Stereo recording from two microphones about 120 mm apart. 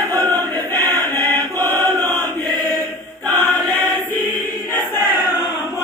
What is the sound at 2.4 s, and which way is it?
Choir, 35° right (ahead or behind).